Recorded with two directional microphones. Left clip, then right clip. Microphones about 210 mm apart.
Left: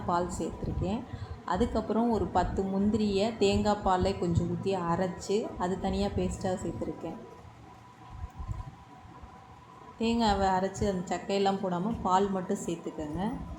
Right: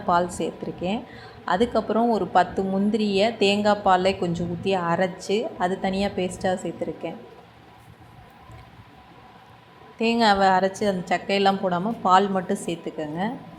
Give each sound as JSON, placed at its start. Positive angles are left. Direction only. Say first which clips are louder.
{"t": 0.1, "sound": "a woman's voice", "louder": "right 9 dB", "side_deg": -15}
{"t": 10.0, "sound": "a woman's voice", "louder": "right 9 dB", "side_deg": -20}